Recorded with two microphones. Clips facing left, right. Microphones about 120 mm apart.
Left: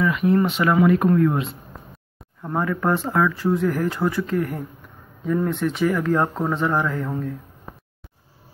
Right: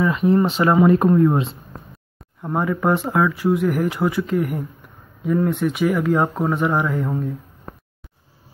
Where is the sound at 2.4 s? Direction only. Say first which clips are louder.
Right 2 dB; 15° right (ahead or behind).